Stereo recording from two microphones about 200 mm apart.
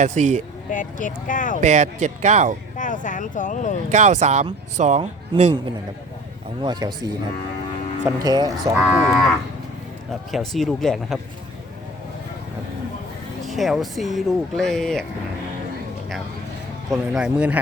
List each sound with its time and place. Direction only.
0.0 s speech: 35° right (ahead or behind)
0.7 s speech: 40° left (ahead or behind)
1.6 s speech: 35° right (ahead or behind)
2.7 s speech: 40° left (ahead or behind)
3.9 s speech: 35° right (ahead or behind)
6.6 s speech: 20° right (ahead or behind)
8.9 s speech: 5° right (ahead or behind)
13.4 s speech: centre (ahead or behind)
17.1 s speech: 5° right (ahead or behind)